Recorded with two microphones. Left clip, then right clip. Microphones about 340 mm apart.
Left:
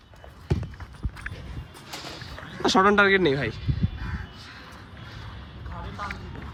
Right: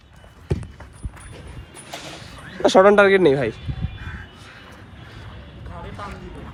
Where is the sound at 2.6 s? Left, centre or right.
Centre.